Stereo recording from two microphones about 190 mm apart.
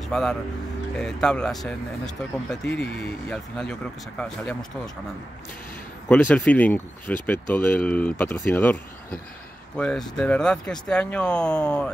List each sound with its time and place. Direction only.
0.1 s speech: 5° left (ahead or behind)
6.0 s speech: 5° left (ahead or behind)
9.8 s speech: 5° left (ahead or behind)